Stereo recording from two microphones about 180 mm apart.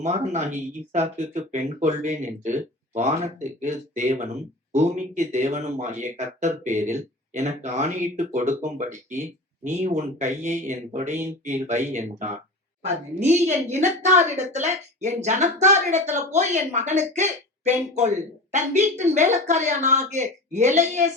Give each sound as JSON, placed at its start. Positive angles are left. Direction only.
{"t": 0.0, "sound": "a woman's voice", "side_deg": -40}